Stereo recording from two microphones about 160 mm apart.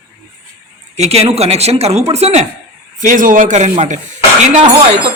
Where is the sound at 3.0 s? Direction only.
55° right (ahead or behind).